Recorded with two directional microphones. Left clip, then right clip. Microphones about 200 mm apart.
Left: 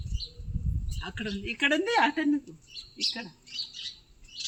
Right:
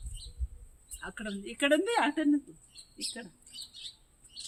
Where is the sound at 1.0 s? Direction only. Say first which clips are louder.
Left 4 dB; 10° left (ahead or behind).